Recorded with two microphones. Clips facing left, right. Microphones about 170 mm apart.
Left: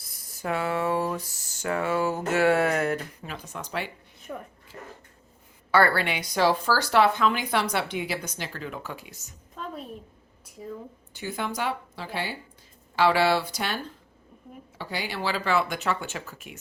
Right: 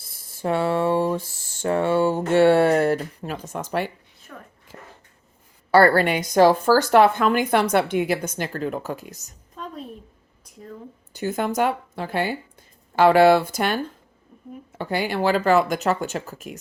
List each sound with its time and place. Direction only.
0.0 s speech: 25° right (ahead or behind)
3.3 s speech: 45° right (ahead or behind)
5.7 s speech: 40° right (ahead or behind)
11.1 s speech: 45° right (ahead or behind)